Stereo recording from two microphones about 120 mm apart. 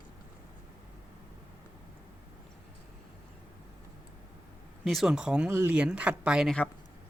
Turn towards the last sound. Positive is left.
turn(degrees=-5)  # may be behind; listen again after turning